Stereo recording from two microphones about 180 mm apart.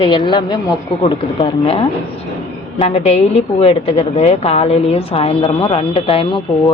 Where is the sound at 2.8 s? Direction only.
35° left (ahead or behind).